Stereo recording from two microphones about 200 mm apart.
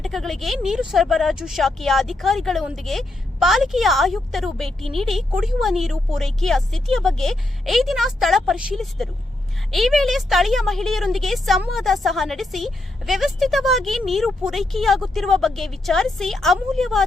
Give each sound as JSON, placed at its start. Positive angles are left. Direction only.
{"t": 0.0, "sound": "speech", "side_deg": 0}